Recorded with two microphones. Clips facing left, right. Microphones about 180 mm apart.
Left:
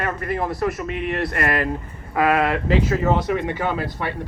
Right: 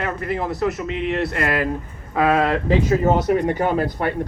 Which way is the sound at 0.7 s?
55° left (ahead or behind).